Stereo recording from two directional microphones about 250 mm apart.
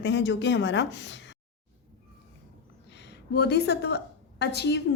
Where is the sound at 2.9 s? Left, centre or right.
Left.